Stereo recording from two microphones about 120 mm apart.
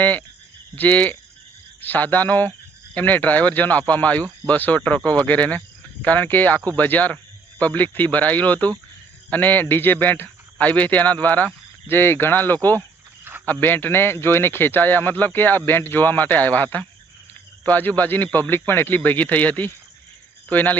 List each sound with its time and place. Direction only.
0.0 s speech: 15° left (ahead or behind)